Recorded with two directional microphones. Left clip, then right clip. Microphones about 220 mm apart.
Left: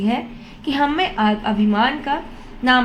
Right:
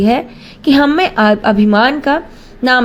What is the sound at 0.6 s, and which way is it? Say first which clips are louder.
A woman's voice: right 8 dB; 35° right (ahead or behind).